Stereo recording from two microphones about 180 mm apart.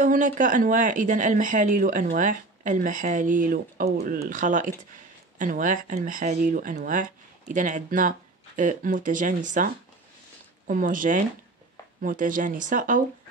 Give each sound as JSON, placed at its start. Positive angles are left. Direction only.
{"t": 0.0, "sound": "speech", "side_deg": -45}
{"t": 10.7, "sound": "speech", "side_deg": -50}